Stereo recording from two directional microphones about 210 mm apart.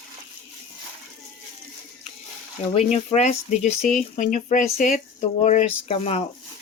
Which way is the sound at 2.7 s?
30° left (ahead or behind).